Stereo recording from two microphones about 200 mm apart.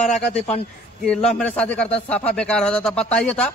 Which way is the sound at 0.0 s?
Centre (ahead or behind).